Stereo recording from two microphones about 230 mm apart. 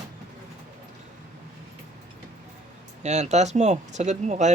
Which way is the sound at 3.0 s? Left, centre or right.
Right.